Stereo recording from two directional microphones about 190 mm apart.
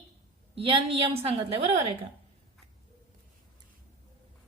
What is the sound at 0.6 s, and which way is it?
A woman's voice, 30° right (ahead or behind).